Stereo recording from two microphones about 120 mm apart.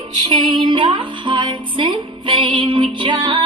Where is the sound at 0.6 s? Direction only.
40° right (ahead or behind).